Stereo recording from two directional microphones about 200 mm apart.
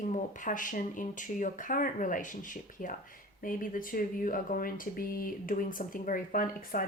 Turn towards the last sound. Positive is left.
turn(degrees=45)  # may be behind; listen again after turning